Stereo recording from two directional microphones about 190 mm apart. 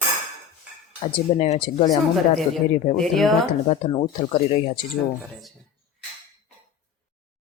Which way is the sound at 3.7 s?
25° left (ahead or behind).